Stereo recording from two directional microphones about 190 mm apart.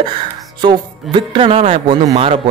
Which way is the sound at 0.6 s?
25° right (ahead or behind).